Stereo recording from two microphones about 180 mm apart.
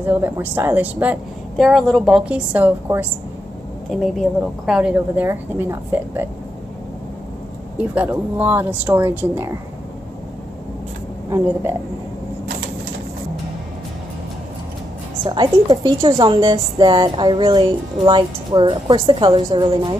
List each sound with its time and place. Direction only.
0.1 s a woman's voice: 10° right (ahead or behind)
7.7 s a woman's voice: 10° right (ahead or behind)
11.2 s a woman's voice: 15° right (ahead or behind)
15.2 s a woman's voice: 25° right (ahead or behind)